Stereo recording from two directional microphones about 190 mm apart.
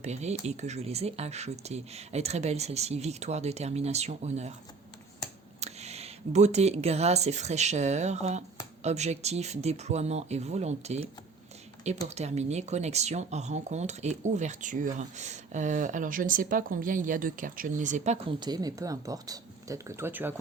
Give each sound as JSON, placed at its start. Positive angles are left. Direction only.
{"t": 0.0, "sound": "speech", "side_deg": -35}
{"t": 5.5, "sound": "speech", "side_deg": -35}
{"t": 12.0, "sound": "speech", "side_deg": -35}
{"t": 18.3, "sound": "speech", "side_deg": -20}